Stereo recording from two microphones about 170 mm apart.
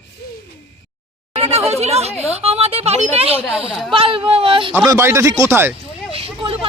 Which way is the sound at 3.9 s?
30° right (ahead or behind).